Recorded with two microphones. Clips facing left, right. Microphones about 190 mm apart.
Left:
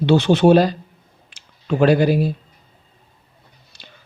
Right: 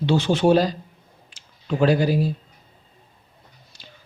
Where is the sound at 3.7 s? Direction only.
70° left (ahead or behind).